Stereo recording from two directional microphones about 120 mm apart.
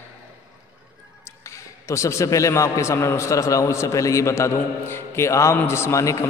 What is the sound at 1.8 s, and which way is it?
A man's voice, 25° left (ahead or behind).